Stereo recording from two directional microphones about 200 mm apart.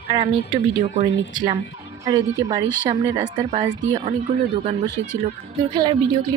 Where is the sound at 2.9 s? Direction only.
15° right (ahead or behind).